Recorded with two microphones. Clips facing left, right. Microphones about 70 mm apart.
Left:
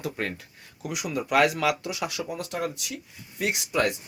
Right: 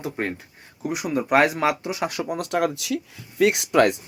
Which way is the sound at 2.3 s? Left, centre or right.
Right.